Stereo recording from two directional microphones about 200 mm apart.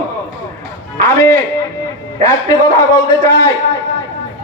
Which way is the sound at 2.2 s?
15° left (ahead or behind).